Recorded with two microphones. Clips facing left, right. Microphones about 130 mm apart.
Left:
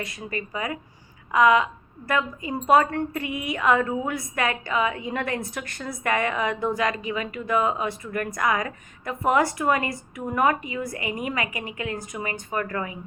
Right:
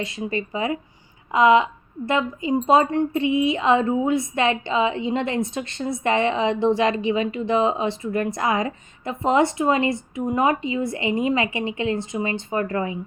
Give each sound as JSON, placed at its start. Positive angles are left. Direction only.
{"t": 0.0, "sound": "a woman's voice", "side_deg": -25}